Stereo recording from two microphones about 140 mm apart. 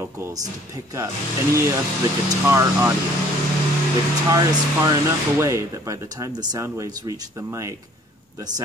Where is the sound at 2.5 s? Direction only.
20° right (ahead or behind).